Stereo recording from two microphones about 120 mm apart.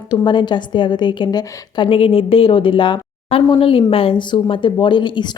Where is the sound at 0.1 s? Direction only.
40° left (ahead or behind).